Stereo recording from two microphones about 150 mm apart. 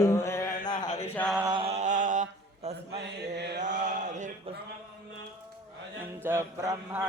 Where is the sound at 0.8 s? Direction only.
50° left (ahead or behind).